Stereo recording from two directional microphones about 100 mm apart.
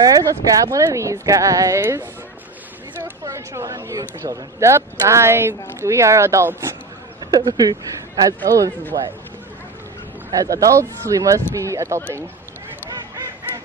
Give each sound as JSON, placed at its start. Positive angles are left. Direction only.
{"t": 0.0, "sound": "speech", "side_deg": -35}
{"t": 3.3, "sound": "speech", "side_deg": -30}
{"t": 7.2, "sound": "speech", "side_deg": -40}
{"t": 10.3, "sound": "speech", "side_deg": -35}
{"t": 12.9, "sound": "honk", "side_deg": -35}